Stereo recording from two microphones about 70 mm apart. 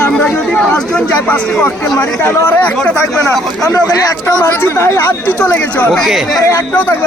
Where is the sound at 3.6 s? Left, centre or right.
Left.